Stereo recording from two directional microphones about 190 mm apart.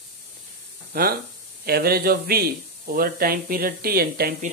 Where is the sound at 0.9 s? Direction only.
50° right (ahead or behind).